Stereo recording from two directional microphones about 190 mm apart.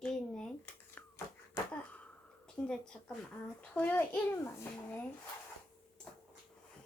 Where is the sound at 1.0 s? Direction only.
10° left (ahead or behind).